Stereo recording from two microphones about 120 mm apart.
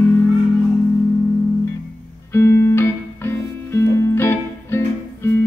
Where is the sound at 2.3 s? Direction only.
20° left (ahead or behind).